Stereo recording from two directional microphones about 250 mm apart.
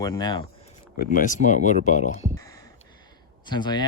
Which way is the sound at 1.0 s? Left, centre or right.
Left.